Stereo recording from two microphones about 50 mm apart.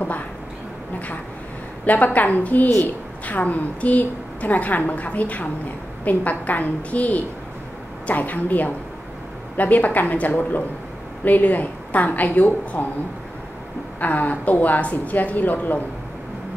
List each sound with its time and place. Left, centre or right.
1.9 s a woman's voice: left
13.9 s a woman's voice: left